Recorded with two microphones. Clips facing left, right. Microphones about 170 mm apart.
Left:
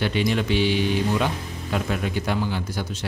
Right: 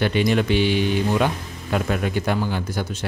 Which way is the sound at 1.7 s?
55° right (ahead or behind).